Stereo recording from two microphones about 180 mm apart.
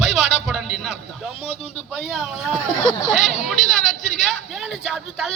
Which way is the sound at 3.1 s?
40° left (ahead or behind).